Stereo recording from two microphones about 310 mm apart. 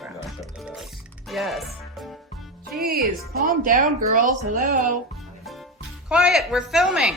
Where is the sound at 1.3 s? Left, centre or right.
Centre.